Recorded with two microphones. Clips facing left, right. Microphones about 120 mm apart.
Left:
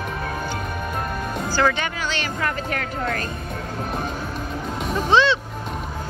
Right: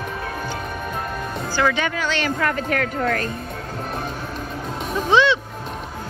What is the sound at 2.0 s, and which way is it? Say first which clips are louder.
Speech: right 4 dB; 55° right (ahead or behind).